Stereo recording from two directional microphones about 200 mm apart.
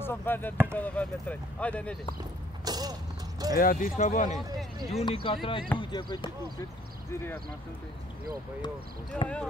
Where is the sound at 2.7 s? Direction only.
20° right (ahead or behind).